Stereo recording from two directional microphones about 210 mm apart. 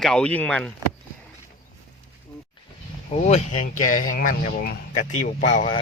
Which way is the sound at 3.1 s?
30° left (ahead or behind).